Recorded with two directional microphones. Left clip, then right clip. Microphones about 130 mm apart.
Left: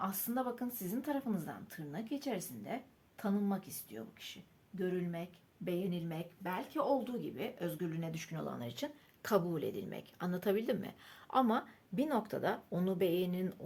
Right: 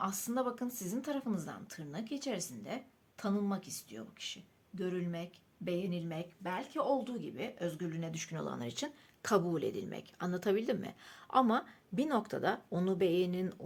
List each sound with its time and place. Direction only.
0.0 s speech: 25° right (ahead or behind)